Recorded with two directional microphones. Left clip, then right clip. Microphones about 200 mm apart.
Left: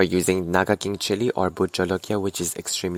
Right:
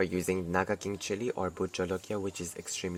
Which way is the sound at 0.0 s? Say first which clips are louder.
Left 10 dB; 40° left (ahead or behind).